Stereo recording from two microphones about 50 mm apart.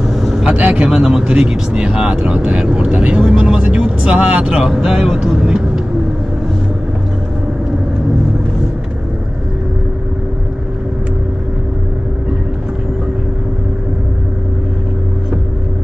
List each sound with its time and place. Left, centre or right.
0.1 s vehicle: centre
0.5 s speech: right
0.8 s speech: centre